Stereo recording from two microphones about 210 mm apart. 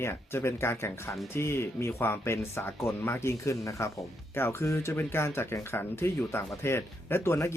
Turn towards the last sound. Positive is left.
turn(degrees=10)  # may be behind; listen again after turning